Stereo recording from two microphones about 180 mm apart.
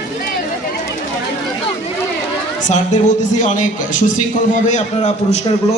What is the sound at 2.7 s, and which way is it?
A man's voice, 40° left (ahead or behind).